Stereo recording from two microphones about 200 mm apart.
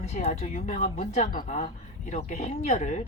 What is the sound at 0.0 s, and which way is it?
Speech, 35° left (ahead or behind).